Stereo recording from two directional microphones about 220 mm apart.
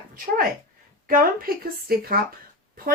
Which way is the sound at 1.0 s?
40° right (ahead or behind).